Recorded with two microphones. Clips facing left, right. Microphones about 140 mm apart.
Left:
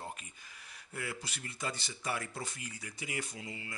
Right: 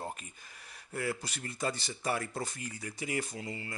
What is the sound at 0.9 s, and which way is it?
Speech, 45° right (ahead or behind).